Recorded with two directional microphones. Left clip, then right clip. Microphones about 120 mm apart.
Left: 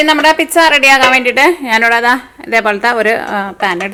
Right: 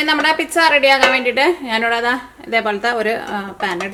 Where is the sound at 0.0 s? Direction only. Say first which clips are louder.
Left 7 dB; 30° left (ahead or behind).